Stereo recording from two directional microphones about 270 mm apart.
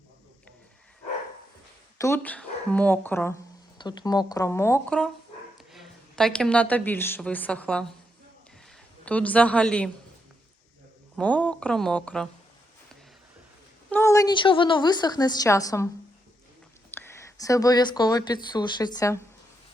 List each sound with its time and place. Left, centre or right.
2.0 s a woman's voice: centre
9.0 s speech: centre
11.2 s speech: centre
13.9 s a woman's voice: centre
16.9 s speech: centre